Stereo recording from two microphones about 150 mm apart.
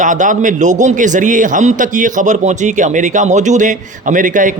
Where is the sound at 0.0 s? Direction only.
55° right (ahead or behind).